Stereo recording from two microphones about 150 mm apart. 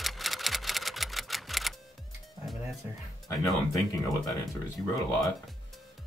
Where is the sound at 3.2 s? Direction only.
20° left (ahead or behind).